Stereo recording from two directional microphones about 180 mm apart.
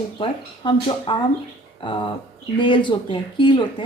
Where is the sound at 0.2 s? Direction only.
25° left (ahead or behind).